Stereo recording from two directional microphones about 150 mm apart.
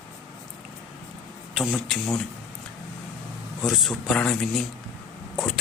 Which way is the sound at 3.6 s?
Centre (ahead or behind).